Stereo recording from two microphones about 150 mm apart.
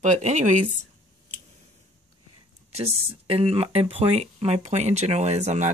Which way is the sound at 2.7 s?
40° right (ahead or behind).